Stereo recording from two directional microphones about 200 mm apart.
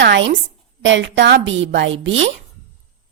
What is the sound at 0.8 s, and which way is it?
A woman's voice, 65° right (ahead or behind).